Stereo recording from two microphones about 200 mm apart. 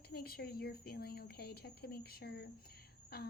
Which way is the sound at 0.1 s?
50° left (ahead or behind).